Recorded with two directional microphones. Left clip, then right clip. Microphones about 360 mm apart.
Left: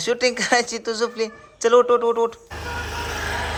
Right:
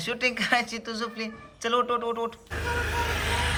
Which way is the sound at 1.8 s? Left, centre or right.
Centre.